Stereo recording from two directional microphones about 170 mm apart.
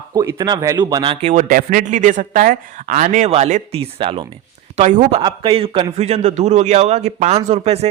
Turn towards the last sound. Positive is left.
turn(degrees=-40)  # may be behind; listen again after turning